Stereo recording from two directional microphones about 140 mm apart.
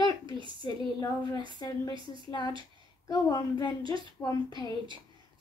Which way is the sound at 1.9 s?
35° right (ahead or behind).